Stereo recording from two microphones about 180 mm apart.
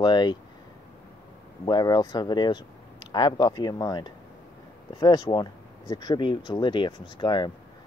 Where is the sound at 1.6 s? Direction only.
25° left (ahead or behind).